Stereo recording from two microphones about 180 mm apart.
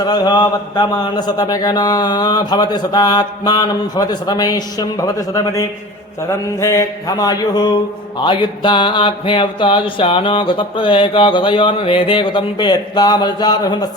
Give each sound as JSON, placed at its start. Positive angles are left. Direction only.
{"t": 0.0, "sound": "speech", "side_deg": 25}